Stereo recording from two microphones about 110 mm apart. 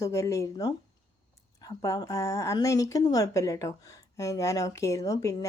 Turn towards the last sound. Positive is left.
turn(degrees=30)  # may be behind; listen again after turning